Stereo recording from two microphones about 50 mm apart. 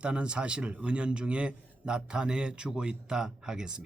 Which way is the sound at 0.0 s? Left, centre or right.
Right.